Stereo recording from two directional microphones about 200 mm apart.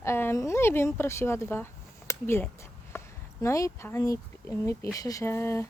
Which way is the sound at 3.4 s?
15° left (ahead or behind).